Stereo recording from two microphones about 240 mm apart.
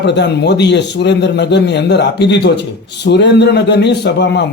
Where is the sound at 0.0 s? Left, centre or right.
Left.